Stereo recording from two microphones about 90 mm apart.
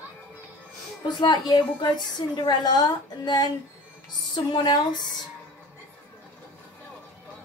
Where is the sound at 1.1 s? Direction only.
50° left (ahead or behind).